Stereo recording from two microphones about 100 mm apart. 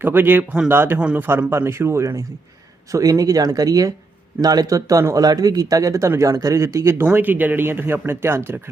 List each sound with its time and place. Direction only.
0.0 s speech: 20° right (ahead or behind)
7.1 s speech: 15° right (ahead or behind)